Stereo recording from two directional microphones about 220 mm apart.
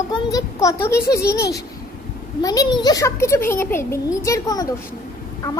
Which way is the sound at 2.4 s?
15° left (ahead or behind).